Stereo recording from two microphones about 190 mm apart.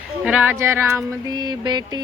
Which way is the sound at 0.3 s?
10° right (ahead or behind).